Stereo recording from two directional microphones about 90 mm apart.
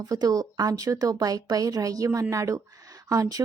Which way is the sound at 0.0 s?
45° right (ahead or behind).